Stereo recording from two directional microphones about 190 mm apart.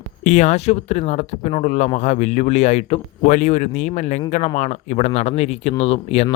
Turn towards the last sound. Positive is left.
turn(degrees=35)  # may be behind; listen again after turning